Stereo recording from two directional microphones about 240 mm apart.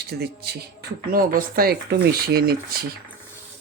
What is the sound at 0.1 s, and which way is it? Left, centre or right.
Speech, right.